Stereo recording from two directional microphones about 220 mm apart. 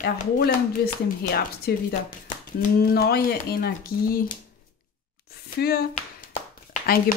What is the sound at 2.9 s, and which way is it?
Speech, 45° left (ahead or behind).